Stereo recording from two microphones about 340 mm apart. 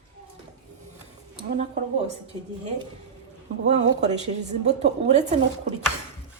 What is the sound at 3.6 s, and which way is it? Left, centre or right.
A woman's voice, centre.